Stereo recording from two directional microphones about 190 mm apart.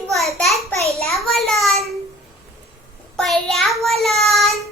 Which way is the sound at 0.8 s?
30° right (ahead or behind).